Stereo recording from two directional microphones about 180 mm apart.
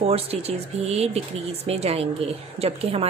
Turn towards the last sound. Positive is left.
turn(degrees=-35)  # may be behind; listen again after turning